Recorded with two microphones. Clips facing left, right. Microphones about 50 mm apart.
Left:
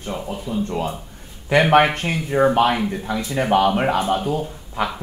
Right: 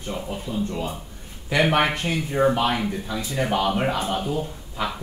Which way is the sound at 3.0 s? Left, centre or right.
Left.